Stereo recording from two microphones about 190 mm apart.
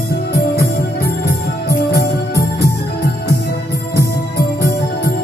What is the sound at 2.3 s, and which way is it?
Music, 55° left (ahead or behind).